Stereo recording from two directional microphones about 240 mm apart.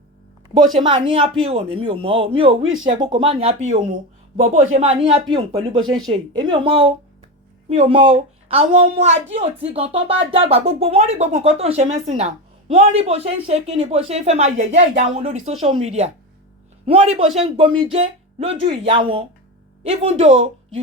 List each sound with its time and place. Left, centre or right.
0.8 s a woman's voice: centre